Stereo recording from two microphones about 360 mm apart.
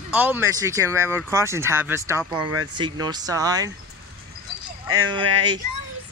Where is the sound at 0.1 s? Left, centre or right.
Centre.